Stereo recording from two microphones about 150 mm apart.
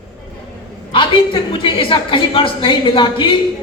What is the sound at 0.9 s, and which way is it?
A woman's voice, 35° left (ahead or behind).